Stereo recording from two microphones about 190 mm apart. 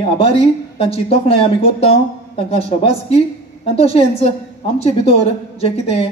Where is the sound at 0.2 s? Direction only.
30° left (ahead or behind).